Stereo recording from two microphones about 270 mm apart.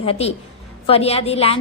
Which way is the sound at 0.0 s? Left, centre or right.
Left.